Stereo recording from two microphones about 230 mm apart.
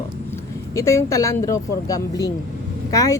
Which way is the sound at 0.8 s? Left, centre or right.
Centre.